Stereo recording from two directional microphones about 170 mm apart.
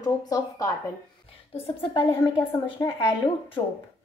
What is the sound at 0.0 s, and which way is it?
Speech, 20° left (ahead or behind).